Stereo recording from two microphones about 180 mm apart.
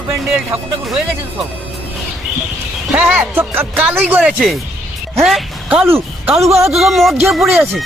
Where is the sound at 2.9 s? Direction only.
5° right (ahead or behind).